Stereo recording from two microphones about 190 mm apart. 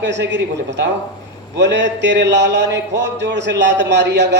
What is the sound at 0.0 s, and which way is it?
A man's voice, 65° right (ahead or behind).